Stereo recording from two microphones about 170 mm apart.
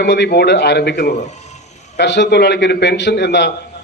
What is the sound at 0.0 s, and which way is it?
Speech, 85° left.